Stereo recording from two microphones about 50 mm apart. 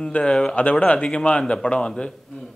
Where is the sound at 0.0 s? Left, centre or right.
Left.